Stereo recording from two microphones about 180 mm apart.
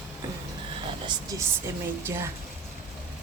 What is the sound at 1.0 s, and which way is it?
A woman's voice, 20° right (ahead or behind).